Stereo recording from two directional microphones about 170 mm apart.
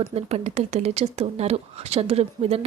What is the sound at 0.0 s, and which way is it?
Speech, 40° right (ahead or behind).